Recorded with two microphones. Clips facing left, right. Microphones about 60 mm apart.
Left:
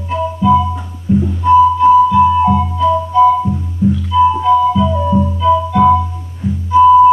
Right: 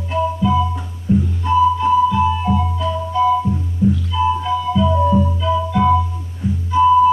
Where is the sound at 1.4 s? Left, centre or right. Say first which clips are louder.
Left 8 dB; centre.